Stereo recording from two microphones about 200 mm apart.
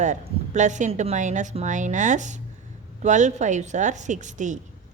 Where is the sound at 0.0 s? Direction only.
35° right (ahead or behind).